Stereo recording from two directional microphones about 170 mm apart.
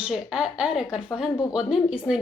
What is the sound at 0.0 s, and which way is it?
A woman's voice, 5° right (ahead or behind).